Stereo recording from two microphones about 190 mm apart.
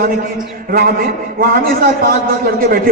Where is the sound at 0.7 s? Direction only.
50° right (ahead or behind).